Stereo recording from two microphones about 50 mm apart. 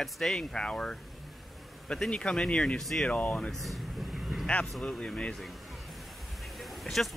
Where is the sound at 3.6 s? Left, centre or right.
Centre.